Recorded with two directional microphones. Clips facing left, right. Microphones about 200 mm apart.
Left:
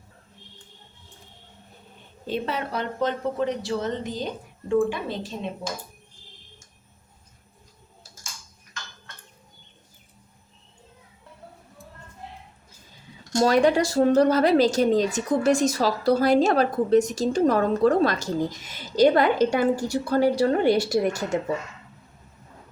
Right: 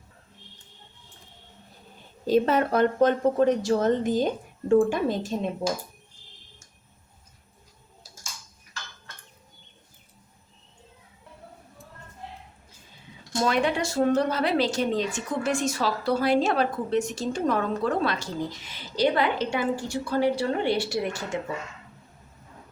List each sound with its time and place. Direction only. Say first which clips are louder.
2.2 s speech: right 7 dB; 45° right (ahead or behind)
13.4 s a woman's voice: left 6 dB; 40° left (ahead or behind)